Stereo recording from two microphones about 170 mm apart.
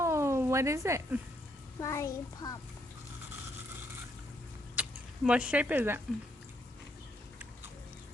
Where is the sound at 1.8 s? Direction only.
20° left (ahead or behind).